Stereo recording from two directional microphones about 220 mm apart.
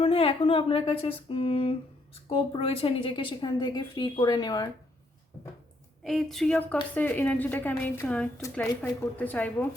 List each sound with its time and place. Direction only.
0.0 s a woman's voice: 25° left (ahead or behind)
6.0 s a woman's voice: centre (ahead or behind)